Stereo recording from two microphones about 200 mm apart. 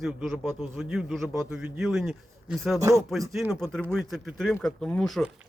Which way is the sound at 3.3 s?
5° right (ahead or behind).